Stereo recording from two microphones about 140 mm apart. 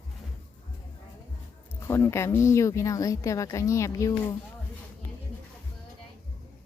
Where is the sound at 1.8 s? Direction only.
20° left (ahead or behind).